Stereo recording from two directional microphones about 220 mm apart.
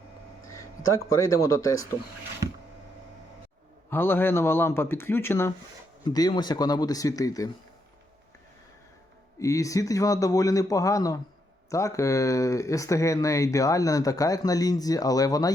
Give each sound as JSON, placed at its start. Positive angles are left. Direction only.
{"t": 1.1, "sound": "speech", "side_deg": 15}
{"t": 3.8, "sound": "speech", "side_deg": 10}
{"t": 9.4, "sound": "speech", "side_deg": 15}